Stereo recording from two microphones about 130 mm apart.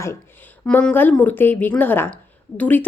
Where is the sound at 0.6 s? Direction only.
10° left (ahead or behind).